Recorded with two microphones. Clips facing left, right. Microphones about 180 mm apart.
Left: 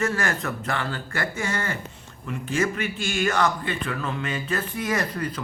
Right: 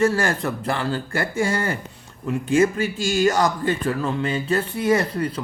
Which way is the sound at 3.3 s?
40° right (ahead or behind).